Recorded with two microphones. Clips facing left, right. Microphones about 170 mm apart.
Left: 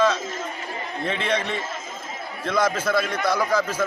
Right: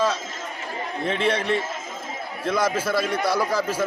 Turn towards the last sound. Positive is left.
turn(degrees=-10)  # may be behind; listen again after turning